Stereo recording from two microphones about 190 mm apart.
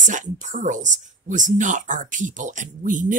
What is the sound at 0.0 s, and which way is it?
Speech, 40° right (ahead or behind).